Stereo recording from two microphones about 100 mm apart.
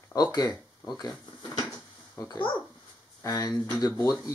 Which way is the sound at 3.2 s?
35° left (ahead or behind).